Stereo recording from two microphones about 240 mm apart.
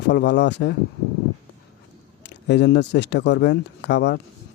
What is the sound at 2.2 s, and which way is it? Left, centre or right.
Speech, left.